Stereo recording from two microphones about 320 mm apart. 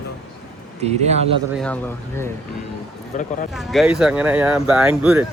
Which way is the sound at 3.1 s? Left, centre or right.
Left.